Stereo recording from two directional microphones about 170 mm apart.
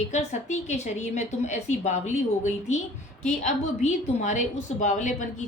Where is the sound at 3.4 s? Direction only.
45° left (ahead or behind).